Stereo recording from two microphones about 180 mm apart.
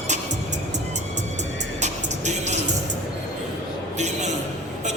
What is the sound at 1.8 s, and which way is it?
Music, 40° right (ahead or behind).